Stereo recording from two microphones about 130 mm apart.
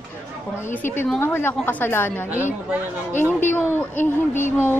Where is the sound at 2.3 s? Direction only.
15° right (ahead or behind).